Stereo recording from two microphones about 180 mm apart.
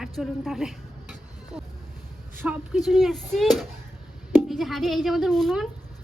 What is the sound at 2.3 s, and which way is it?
A woman's voice, 10° right (ahead or behind).